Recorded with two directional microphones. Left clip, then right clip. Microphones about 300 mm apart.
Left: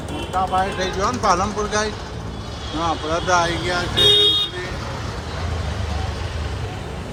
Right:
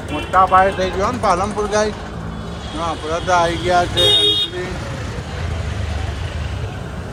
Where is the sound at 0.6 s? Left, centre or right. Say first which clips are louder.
Right 5 dB; centre.